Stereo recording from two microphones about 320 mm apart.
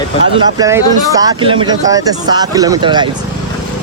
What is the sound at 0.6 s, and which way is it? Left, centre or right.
Speech, centre.